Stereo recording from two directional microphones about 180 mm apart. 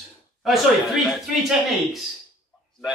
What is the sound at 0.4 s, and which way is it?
Speech, centre (ahead or behind).